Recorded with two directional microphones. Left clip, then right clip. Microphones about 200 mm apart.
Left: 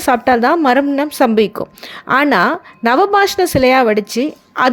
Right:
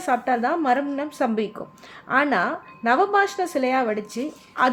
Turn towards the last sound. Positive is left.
turn(degrees=45)  # may be behind; listen again after turning